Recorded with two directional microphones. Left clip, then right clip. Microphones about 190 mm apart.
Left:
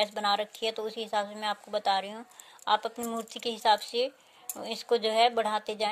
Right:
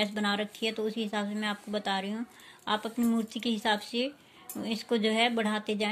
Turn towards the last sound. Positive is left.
turn(degrees=45)  # may be behind; listen again after turning